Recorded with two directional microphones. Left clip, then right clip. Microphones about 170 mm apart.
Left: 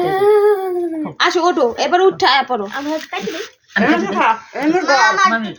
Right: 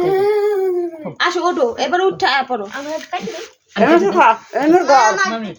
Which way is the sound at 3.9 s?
90° right.